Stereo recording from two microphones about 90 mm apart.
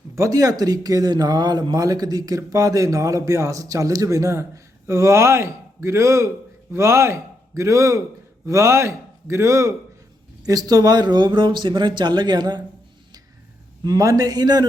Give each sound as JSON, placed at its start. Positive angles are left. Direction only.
{"t": 0.2, "sound": "speech", "side_deg": -40}
{"t": 13.8, "sound": "speech", "side_deg": -40}